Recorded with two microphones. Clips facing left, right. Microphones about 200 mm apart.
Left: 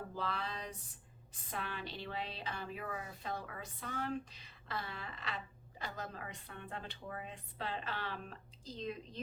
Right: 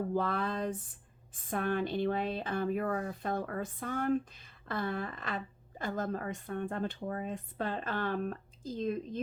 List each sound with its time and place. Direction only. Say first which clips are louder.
0.1 s speech: right 9 dB; 50° right (ahead or behind)